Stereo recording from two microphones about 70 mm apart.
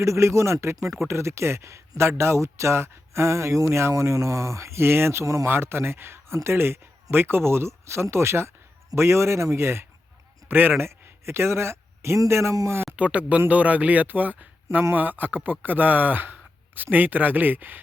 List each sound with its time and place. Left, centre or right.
0.0 s speech: right
5.5 s speech: right
13.0 s speech: centre